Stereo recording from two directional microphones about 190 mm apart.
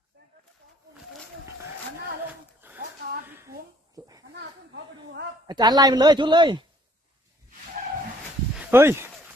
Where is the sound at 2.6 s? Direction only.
10° right (ahead or behind).